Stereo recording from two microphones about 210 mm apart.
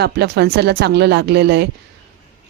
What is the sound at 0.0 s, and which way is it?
Speech, 50° right (ahead or behind).